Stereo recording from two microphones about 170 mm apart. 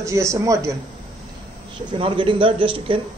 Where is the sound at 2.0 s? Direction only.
30° right (ahead or behind).